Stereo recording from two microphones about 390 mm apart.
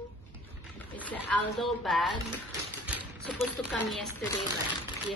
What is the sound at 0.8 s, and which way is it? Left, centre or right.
Speech, centre.